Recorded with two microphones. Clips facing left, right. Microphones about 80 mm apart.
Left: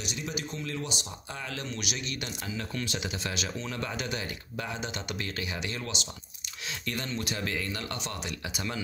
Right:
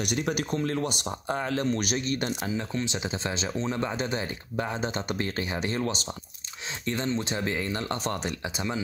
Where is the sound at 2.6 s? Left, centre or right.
Right.